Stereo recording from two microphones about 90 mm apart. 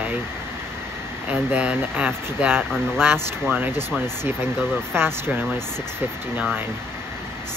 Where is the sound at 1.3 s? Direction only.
15° right (ahead or behind).